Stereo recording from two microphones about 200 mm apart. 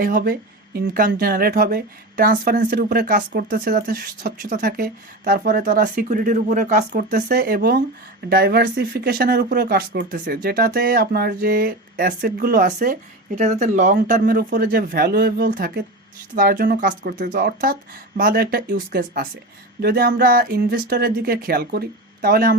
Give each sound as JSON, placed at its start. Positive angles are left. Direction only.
{"t": 0.0, "sound": "speech", "side_deg": -45}